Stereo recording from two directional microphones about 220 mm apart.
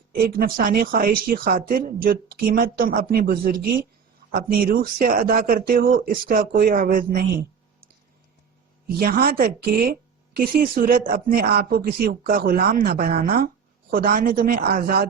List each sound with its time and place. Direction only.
0.1 s speech: 45° right (ahead or behind)
9.0 s speech: 40° right (ahead or behind)